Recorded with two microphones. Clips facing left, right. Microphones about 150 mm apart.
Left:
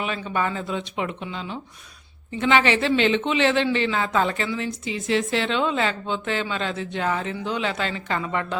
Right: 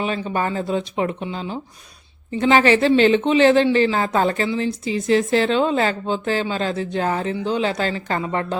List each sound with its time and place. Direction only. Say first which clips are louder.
0.0 s a woman's voice: right 3 dB; 35° right (ahead or behind)